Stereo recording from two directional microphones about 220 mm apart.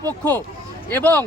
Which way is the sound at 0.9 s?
5° left (ahead or behind).